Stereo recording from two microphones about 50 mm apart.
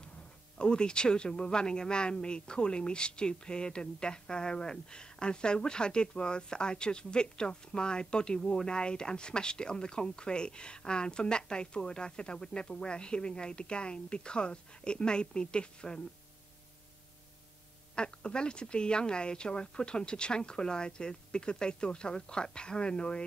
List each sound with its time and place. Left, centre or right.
0.6 s speech: centre
17.9 s speech: centre